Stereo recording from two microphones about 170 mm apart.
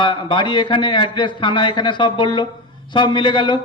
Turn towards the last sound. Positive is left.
turn(degrees=30)  # may be behind; listen again after turning